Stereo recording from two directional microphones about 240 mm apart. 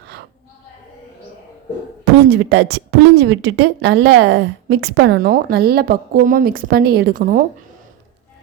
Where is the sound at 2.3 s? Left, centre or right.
Right.